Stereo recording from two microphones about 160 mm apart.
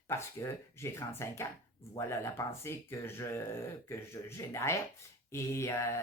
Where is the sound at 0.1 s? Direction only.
15° left (ahead or behind).